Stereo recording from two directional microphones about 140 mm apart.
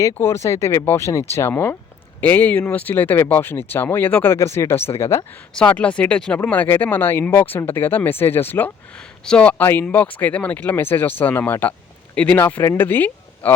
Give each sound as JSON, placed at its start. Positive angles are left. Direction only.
{"t": 0.0, "sound": "speech", "side_deg": 20}